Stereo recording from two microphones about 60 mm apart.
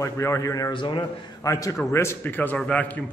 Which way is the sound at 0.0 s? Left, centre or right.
Left.